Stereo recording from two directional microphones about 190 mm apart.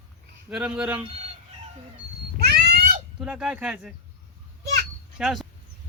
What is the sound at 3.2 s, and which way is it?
Speech, 5° right (ahead or behind).